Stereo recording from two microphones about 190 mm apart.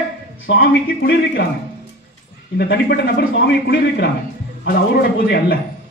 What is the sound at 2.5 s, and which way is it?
A man's voice, 60° left (ahead or behind).